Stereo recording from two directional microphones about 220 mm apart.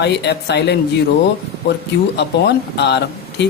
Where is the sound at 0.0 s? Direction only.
50° left (ahead or behind).